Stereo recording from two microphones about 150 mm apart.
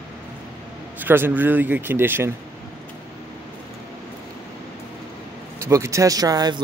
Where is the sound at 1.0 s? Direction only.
15° right (ahead or behind).